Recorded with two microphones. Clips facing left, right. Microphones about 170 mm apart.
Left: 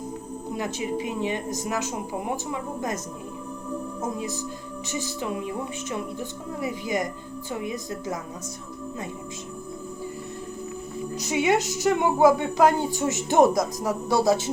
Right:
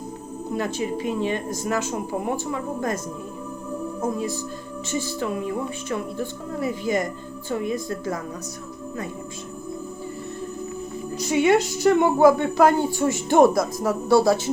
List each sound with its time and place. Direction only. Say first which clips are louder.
0.5 s a woman's voice: right 3 dB; 15° left (ahead or behind)
4.9 s a woman's voice: right 4 dB; 15° left (ahead or behind)
11.2 s a woman's voice: right 4 dB; 15° left (ahead or behind)